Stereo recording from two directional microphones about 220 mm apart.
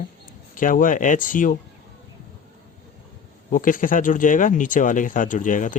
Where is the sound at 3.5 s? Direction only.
40° left (ahead or behind).